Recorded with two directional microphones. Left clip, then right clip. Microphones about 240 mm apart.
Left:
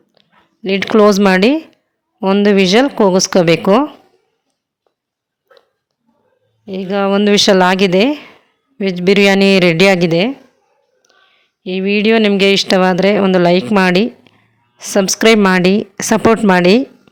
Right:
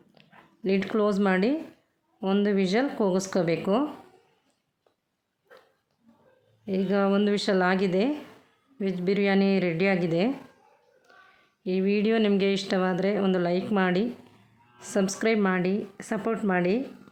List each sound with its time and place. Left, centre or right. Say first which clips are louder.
0.6 s speech: left 15 dB; left
6.7 s speech: left 10 dB; left
11.6 s speech: left 11 dB; left